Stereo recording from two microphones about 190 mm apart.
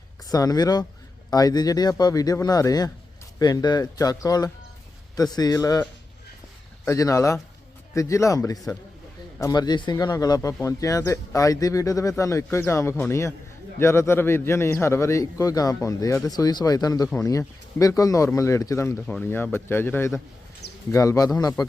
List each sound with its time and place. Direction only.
0.3 s speech: 20° left (ahead or behind)
6.8 s speech: 15° left (ahead or behind)